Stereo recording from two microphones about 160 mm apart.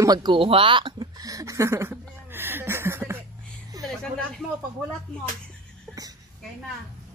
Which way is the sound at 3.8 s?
20° right (ahead or behind).